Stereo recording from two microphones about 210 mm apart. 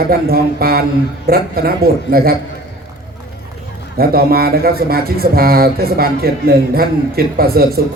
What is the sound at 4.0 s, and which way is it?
Speech, 45° right (ahead or behind).